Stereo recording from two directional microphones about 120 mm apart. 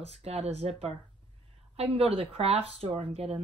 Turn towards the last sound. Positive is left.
turn(degrees=-55)  # may be behind; listen again after turning